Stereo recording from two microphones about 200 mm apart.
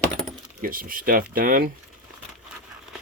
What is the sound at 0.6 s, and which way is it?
Speech, 45° right (ahead or behind).